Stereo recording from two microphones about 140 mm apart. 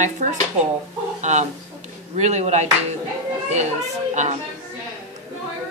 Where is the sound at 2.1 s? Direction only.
55° right (ahead or behind).